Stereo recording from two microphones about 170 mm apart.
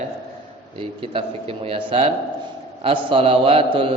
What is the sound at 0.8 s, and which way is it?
A man's voice, 35° right (ahead or behind).